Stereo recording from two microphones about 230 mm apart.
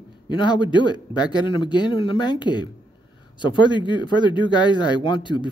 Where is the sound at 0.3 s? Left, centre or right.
Centre.